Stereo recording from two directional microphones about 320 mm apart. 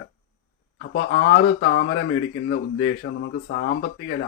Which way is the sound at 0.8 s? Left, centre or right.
Left.